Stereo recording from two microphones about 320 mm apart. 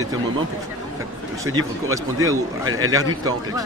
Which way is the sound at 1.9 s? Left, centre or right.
Centre.